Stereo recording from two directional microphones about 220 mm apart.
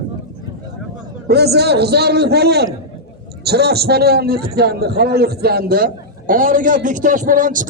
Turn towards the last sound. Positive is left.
turn(degrees=-35)  # may be behind; listen again after turning